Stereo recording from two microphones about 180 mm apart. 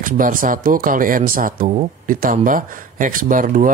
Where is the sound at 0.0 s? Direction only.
50° right (ahead or behind).